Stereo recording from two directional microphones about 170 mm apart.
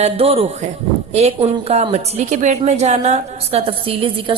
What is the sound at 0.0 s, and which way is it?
A woman's voice, 35° right (ahead or behind).